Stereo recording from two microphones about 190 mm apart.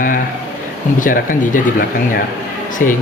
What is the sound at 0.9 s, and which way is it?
Speech, 45° left (ahead or behind).